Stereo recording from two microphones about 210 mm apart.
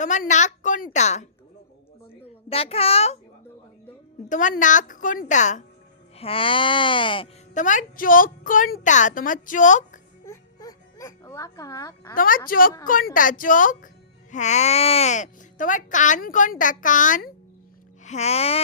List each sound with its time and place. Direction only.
0.0 s speech: 35° left (ahead or behind)
2.5 s music: 30° left (ahead or behind)
4.3 s speech: 35° left (ahead or behind)
6.1 s music: 25° left (ahead or behind)
7.5 s speech: 35° left (ahead or behind)
10.2 s music: 15° left (ahead or behind)
12.1 s a woman's voice: 40° left (ahead or behind)
18.0 s music: 30° left (ahead or behind)